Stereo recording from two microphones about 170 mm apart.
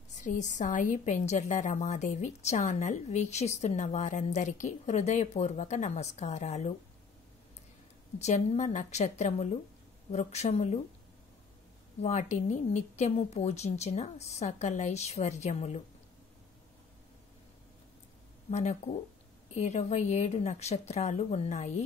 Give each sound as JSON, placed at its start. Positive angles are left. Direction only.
{"t": 0.2, "sound": "a woman's voice", "side_deg": 45}
{"t": 8.2, "sound": "a woman's voice", "side_deg": 40}
{"t": 12.0, "sound": "speech", "side_deg": 40}
{"t": 18.5, "sound": "a woman's voice", "side_deg": 45}